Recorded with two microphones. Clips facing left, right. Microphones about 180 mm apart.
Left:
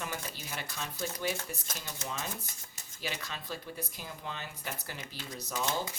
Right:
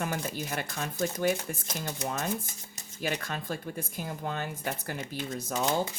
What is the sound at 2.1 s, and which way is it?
A woman's voice, 50° right (ahead or behind).